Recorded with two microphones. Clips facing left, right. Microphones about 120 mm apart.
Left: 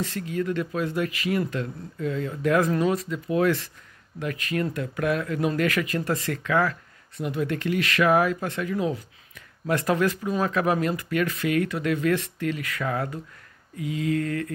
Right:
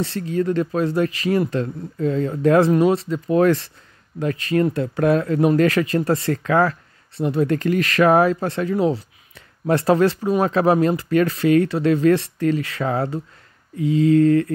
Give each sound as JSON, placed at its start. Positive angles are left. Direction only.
{"t": 0.0, "sound": "speech", "side_deg": -35}